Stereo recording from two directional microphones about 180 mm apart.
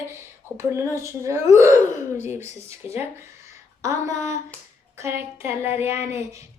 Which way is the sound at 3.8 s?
15° right (ahead or behind).